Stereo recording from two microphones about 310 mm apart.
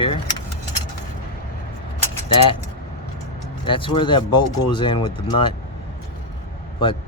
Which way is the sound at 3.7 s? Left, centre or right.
Centre.